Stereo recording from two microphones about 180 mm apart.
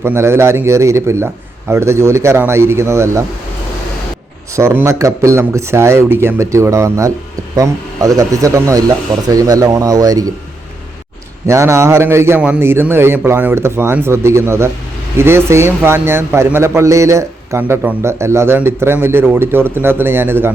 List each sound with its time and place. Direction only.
0.0 s a man's voice: 15° right (ahead or behind)
4.5 s a man's voice: 15° right (ahead or behind)
11.4 s a man's voice: 15° right (ahead or behind)